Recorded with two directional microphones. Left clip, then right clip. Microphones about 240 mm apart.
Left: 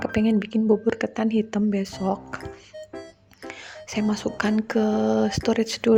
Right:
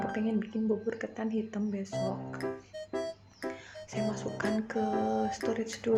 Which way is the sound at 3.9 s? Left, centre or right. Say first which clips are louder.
Left 8 dB; left.